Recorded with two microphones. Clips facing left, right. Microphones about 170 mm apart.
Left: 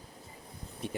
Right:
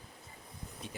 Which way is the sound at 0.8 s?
60° left (ahead or behind).